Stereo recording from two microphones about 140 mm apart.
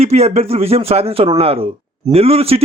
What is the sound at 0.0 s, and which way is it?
A man's voice, 50° right (ahead or behind).